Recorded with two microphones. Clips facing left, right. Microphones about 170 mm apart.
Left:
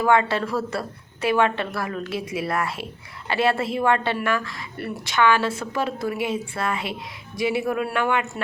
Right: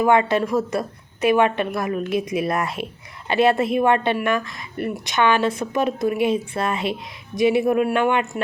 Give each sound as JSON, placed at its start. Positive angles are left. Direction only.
{"t": 0.0, "sound": "a woman's voice", "side_deg": -15}